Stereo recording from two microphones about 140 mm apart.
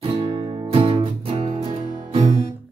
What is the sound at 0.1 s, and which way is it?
Music, 40° right (ahead or behind).